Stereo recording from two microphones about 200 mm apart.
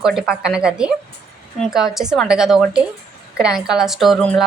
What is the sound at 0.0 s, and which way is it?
A woman's voice, centre (ahead or behind).